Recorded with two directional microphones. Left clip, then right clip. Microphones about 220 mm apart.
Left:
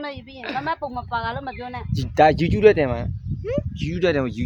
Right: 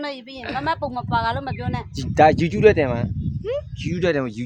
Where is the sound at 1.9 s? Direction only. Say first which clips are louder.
Right 1 dB; 10° left (ahead or behind).